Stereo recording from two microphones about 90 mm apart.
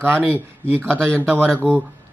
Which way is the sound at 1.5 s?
15° left (ahead or behind).